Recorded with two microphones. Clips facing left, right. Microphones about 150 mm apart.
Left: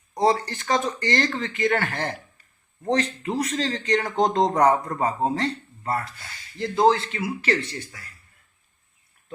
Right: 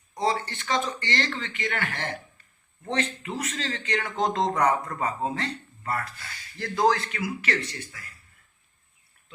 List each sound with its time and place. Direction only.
0.1 s a man's voice: 35° left (ahead or behind)